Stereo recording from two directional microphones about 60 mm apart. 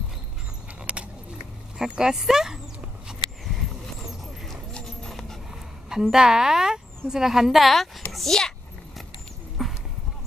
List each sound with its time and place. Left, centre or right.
0.9 s keys jangling: right
1.8 s speech: centre
5.9 s a woman's voice: centre
8.1 s a sound: centre
9.6 s clip-clop: centre